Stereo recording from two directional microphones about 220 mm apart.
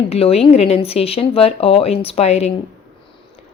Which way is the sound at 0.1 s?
25° left (ahead or behind).